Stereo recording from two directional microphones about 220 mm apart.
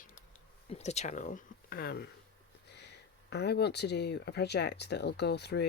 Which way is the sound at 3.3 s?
50° left (ahead or behind).